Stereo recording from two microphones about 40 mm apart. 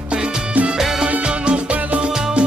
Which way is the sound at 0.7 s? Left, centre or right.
Centre.